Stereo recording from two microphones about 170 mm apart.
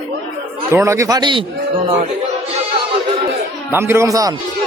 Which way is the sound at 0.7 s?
15° right (ahead or behind).